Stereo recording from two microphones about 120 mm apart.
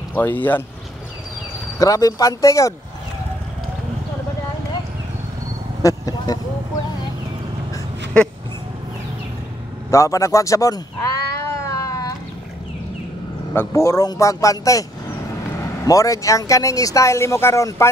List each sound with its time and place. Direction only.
0.1 s a man's voice: 15° left (ahead or behind)
1.8 s speech: 30° left (ahead or behind)
5.8 s vehicle: 30° left (ahead or behind)
9.8 s cat: 25° left (ahead or behind)
13.6 s speech: 25° left (ahead or behind)